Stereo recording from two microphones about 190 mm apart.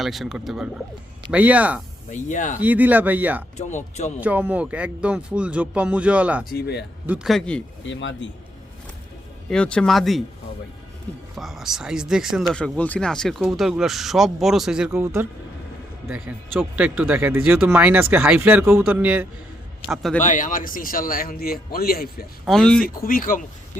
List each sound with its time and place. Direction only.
0.0 s speech: centre (ahead or behind)
2.0 s speech: 40° left (ahead or behind)
2.6 s speech: 10° right (ahead or behind)
3.6 s speech: 40° left (ahead or behind)
4.2 s speech: 10° right (ahead or behind)
6.5 s speech: 55° left (ahead or behind)
7.1 s speech: centre (ahead or behind)
7.9 s speech: 75° left (ahead or behind)
9.5 s speech: 5° left (ahead or behind)
11.3 s speech: centre (ahead or behind)
14.9 s speech: 15° right (ahead or behind)
20.2 s a man's voice: 45° left (ahead or behind)
22.4 s speech: 5° left (ahead or behind)
23.0 s a man's voice: 50° left (ahead or behind)